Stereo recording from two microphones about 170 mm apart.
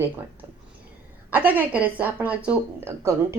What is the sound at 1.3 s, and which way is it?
Speech, 10° right (ahead or behind).